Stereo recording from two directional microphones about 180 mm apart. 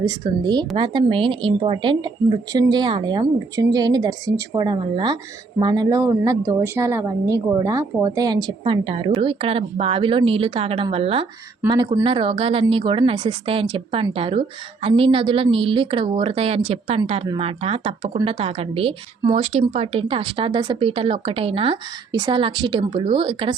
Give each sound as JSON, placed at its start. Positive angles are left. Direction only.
{"t": 0.0, "sound": "a woman's voice", "side_deg": -25}